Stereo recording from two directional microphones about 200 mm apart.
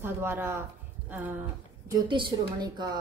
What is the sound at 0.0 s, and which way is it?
A woman's voice, 10° right (ahead or behind).